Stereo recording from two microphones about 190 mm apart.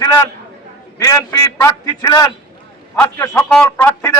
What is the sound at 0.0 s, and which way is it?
A man's voice, 15° left (ahead or behind).